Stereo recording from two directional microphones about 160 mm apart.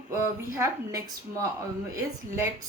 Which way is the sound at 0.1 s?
15° right (ahead or behind).